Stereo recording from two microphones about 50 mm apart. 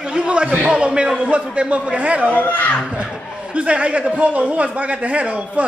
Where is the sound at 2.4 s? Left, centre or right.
Left.